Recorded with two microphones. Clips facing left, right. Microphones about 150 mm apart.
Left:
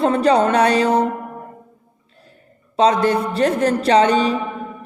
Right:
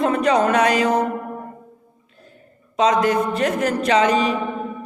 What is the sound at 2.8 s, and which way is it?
Speech, 30° left (ahead or behind).